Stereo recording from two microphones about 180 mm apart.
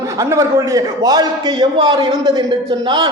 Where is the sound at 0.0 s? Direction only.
20° right (ahead or behind).